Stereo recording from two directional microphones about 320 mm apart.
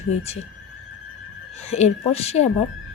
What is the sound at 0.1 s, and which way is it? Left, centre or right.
Speech, centre.